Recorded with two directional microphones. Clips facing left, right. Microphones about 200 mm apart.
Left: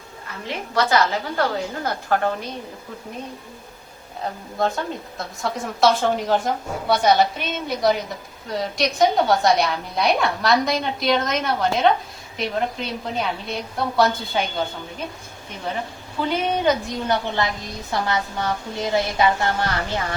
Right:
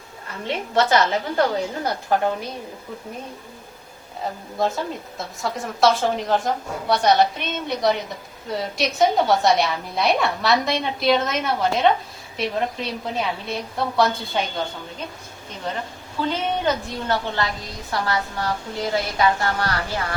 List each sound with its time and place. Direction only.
0.4 s a woman's voice: 25° right (ahead or behind)
4.2 s a woman's voice: 5° right (ahead or behind)
16.3 s a woman's voice: 15° left (ahead or behind)